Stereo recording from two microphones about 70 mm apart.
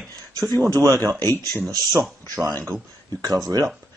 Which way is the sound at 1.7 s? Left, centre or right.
Right.